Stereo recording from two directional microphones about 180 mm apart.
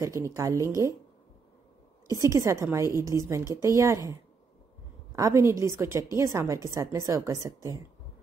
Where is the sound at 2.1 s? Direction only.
15° right (ahead or behind).